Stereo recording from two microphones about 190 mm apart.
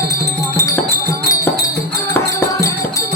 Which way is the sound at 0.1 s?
15° left (ahead or behind).